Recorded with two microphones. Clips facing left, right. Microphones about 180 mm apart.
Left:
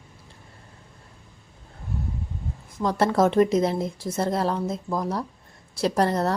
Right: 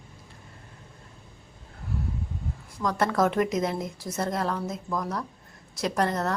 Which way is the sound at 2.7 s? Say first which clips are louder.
Left 4 dB; 30° left (ahead or behind).